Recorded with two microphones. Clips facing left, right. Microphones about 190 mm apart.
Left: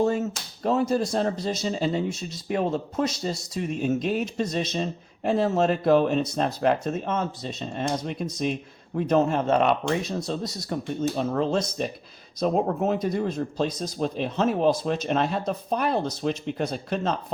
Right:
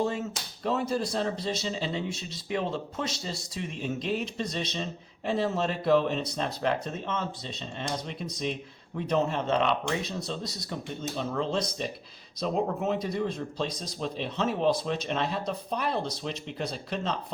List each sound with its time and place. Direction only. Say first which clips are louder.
0.0 s speech: left 6 dB; 45° left (ahead or behind)
11.2 s speech: left 2 dB; 45° left (ahead or behind)